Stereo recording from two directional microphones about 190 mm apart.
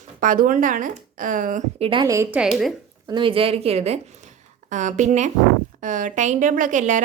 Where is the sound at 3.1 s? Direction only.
25° right (ahead or behind).